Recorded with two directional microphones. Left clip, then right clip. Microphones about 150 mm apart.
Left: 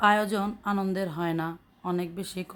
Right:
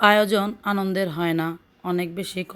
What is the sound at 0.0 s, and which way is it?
Speech, 15° right (ahead or behind).